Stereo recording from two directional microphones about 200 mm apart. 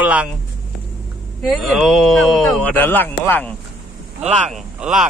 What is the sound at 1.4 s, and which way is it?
Speech, centre (ahead or behind).